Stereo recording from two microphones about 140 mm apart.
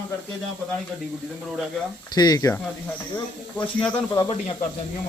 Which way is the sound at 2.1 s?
30° left (ahead or behind).